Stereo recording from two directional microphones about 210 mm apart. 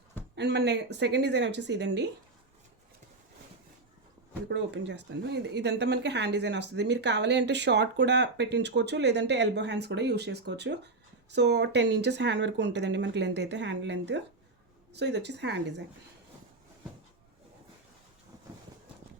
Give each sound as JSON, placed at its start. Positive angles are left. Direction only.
{"t": 0.3, "sound": "speech", "side_deg": -55}
{"t": 4.4, "sound": "speech", "side_deg": -55}